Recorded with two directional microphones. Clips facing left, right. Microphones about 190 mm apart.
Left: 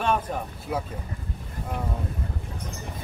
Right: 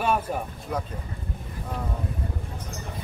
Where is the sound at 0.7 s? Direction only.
5° left (ahead or behind).